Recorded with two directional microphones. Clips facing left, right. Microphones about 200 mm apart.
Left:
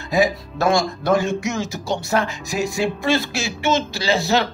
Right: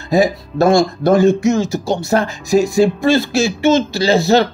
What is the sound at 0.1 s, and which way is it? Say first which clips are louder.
Speech: right 5 dB; 35° right (ahead or behind).